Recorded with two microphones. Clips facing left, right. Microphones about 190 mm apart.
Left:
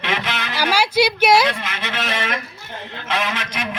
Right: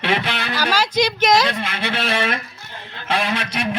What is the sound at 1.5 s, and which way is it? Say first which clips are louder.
Speech: right 3 dB; 35° right (ahead or behind).